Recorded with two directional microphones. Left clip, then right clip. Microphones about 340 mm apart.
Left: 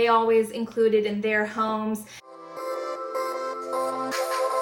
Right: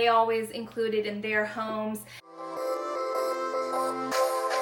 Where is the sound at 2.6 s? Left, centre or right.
Centre.